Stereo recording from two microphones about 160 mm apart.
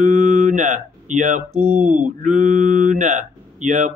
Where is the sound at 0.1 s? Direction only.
55° right (ahead or behind).